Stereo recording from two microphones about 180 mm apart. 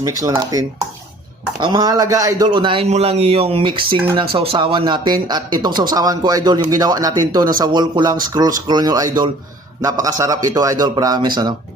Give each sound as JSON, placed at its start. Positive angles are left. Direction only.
{"t": 0.0, "sound": "a man's voice", "side_deg": -20}
{"t": 1.6, "sound": "a man's voice", "side_deg": -25}